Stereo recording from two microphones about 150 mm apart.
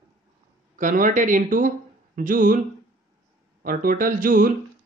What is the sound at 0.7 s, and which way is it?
Speech, 60° right (ahead or behind).